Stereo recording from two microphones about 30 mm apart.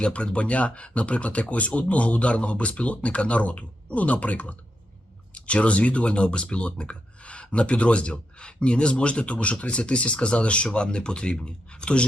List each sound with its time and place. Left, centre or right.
0.0 s speech: left
5.3 s speech: left